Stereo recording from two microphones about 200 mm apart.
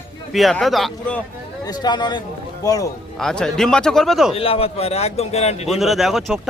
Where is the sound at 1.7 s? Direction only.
20° left (ahead or behind).